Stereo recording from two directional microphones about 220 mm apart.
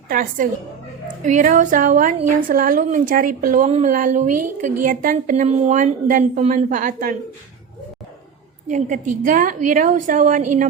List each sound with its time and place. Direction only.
0.1 s a woman's voice: 40° right (ahead or behind)
8.6 s a woman's voice: 35° right (ahead or behind)